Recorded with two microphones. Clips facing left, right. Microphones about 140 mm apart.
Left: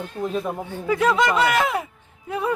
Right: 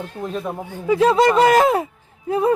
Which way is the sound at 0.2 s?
Centre (ahead or behind).